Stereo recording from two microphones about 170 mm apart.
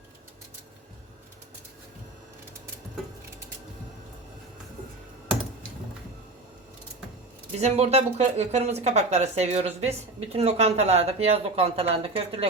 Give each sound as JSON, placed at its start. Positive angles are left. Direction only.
{"t": 7.5, "sound": "speech", "side_deg": -40}